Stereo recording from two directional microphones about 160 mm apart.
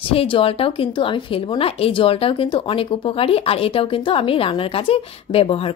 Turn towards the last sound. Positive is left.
turn(degrees=35)  # may be behind; listen again after turning